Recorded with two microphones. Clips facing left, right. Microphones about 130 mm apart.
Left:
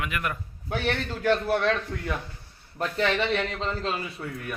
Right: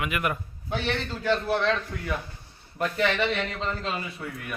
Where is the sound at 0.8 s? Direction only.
50° left (ahead or behind).